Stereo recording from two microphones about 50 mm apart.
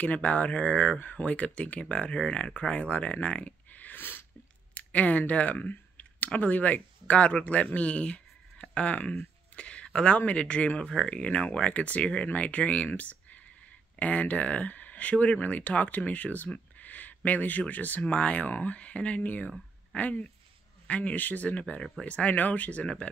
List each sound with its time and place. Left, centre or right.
0.0 s speech: left
4.7 s speech: left
18.1 s speech: left